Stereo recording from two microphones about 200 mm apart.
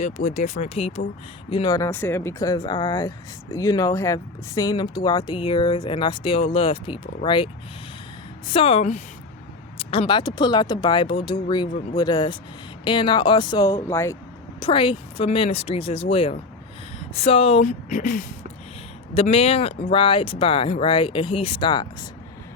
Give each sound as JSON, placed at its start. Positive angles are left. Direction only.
{"t": 0.0, "sound": "speech", "side_deg": 40}
{"t": 14.6, "sound": "speech", "side_deg": 25}
{"t": 19.1, "sound": "speech", "side_deg": 30}